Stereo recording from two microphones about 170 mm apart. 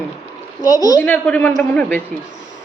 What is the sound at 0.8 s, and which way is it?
Speech, 20° left (ahead or behind).